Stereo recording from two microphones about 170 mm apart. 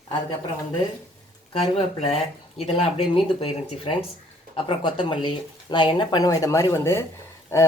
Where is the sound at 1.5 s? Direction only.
35° left (ahead or behind).